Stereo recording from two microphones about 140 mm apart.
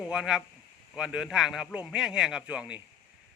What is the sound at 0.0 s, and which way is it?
A man's voice, 5° right (ahead or behind).